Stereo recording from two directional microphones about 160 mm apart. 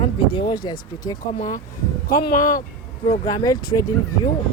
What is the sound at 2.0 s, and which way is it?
Speech, 60° left (ahead or behind).